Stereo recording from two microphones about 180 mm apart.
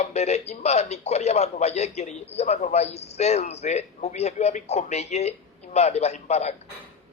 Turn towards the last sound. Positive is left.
turn(degrees=40)  # may be behind; listen again after turning